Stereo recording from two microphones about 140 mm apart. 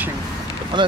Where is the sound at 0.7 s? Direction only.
35° right (ahead or behind).